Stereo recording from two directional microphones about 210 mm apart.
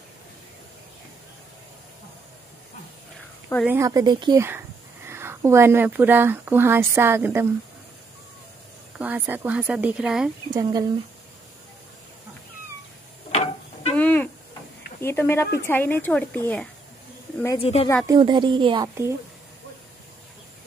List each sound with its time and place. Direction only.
3.6 s speech: 15° right (ahead or behind)
8.9 s speech: 5° right (ahead or behind)
10.5 s speech: 15° right (ahead or behind)
13.3 s tick-tock: 30° left (ahead or behind)
13.9 s a sound: 10° left (ahead or behind)
15.0 s speech: 10° left (ahead or behind)
17.6 s speech: 30° left (ahead or behind)
18.0 s a woman's voice: 20° right (ahead or behind)